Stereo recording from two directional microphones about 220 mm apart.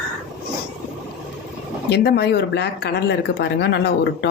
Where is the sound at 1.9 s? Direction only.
50° left (ahead or behind).